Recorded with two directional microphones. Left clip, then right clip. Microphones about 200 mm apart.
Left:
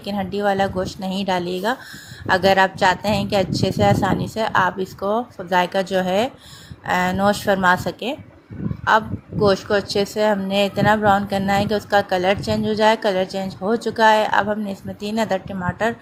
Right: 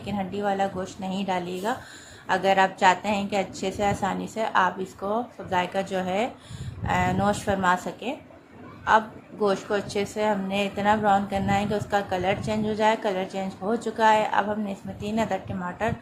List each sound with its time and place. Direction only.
0.0 s a woman's voice: 25° left (ahead or behind)